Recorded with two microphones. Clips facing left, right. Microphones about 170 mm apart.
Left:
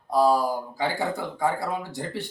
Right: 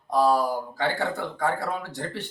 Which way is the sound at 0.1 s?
5° left (ahead or behind).